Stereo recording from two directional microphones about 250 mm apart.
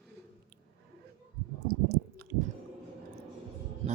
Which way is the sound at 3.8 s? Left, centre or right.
Right.